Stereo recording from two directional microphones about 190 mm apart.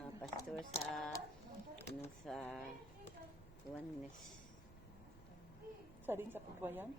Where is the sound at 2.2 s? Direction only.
5° left (ahead or behind).